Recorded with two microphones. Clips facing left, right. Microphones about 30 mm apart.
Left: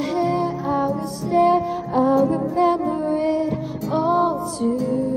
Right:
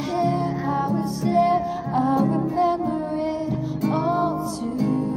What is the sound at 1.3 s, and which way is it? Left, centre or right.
Music, right.